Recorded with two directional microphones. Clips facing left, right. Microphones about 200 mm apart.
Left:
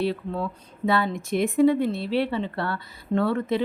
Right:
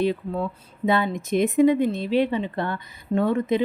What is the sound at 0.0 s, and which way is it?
Speech, 15° right (ahead or behind).